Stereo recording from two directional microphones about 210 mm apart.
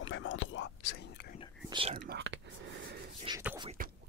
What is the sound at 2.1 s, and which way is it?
Whispering, 55° right (ahead or behind).